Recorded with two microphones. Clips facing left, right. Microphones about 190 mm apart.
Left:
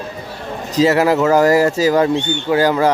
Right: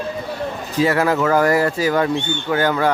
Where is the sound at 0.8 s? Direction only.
20° left (ahead or behind).